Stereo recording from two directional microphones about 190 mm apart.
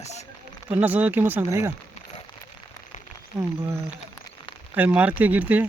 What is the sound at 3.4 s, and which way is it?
Speech, 15° right (ahead or behind).